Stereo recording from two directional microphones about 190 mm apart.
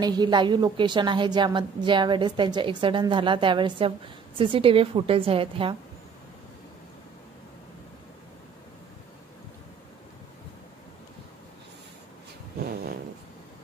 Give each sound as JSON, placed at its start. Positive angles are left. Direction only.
{"t": 0.0, "sound": "a woman's voice", "side_deg": -20}